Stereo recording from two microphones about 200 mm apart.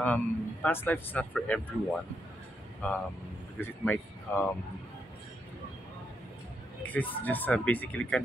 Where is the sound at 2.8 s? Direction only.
10° left (ahead or behind).